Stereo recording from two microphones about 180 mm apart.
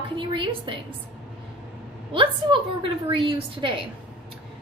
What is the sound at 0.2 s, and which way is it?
Speech, 30° right (ahead or behind).